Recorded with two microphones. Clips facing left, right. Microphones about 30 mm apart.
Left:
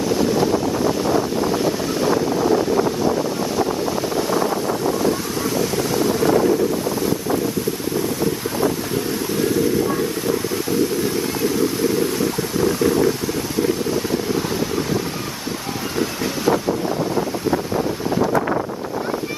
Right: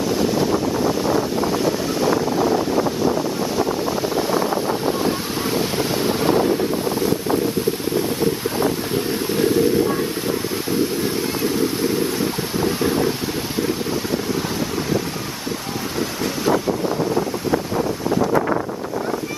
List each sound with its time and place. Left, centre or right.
0.0 s boat: centre
4.1 s a sound: centre
5.0 s wind noise: right
8.2 s wind: right
9.8 s a sound: right
11.4 s wind: right